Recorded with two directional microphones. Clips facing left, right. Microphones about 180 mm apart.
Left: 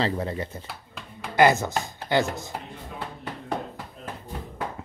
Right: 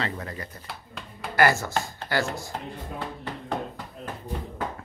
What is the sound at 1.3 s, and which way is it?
Speech, 20° left (ahead or behind).